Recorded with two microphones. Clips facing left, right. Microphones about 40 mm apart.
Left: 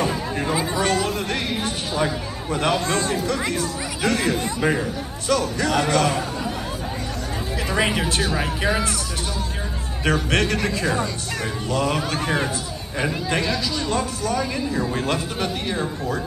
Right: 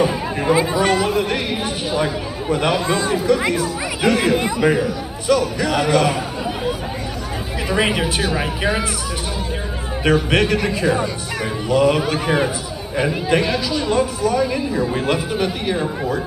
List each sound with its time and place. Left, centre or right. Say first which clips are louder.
0.0 s speech: right 4 dB; centre
4.4 s speech: right 5 dB; right
5.3 s speech: right 3 dB; centre
7.7 s speech: right 3 dB; centre
10.0 s speech: right 4 dB; centre